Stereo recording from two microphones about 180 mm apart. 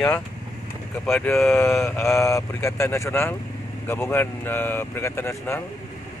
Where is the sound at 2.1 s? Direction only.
15° left (ahead or behind).